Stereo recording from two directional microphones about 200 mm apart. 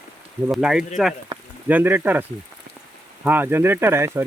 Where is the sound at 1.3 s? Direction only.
25° right (ahead or behind).